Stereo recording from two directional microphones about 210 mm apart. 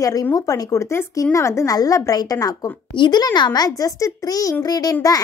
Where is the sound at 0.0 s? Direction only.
15° left (ahead or behind).